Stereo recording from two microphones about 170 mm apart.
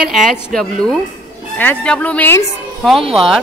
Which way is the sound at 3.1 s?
Centre (ahead or behind).